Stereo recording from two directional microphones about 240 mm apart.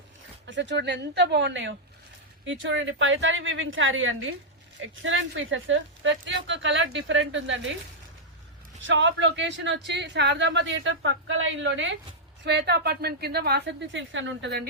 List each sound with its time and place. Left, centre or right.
0.4 s speech: right
8.9 s speech: right